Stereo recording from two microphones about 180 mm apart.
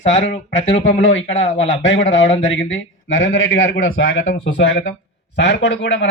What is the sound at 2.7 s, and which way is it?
Speech, 90° left.